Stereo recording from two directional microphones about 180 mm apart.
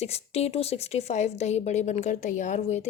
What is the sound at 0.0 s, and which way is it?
Speech, 35° left (ahead or behind).